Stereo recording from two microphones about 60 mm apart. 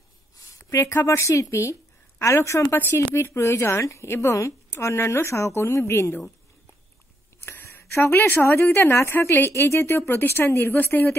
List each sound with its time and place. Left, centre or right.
0.6 s a sound: left
1.1 s a woman's voice: left
2.7 s speech: left
3.0 s a woman's voice: left
7.5 s speech: left
8.9 s speech: left